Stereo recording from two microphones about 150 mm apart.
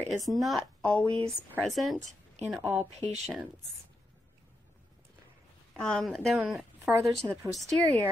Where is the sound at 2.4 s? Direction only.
50° right (ahead or behind).